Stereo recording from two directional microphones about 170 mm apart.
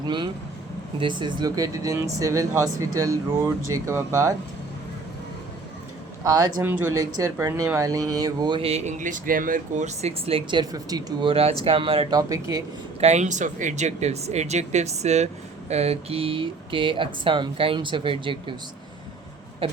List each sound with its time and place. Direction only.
0.0 s speech: 30° right (ahead or behind)
6.2 s speech: 20° right (ahead or behind)
12.3 s speech: 20° right (ahead or behind)
13.0 s speech: 40° right (ahead or behind)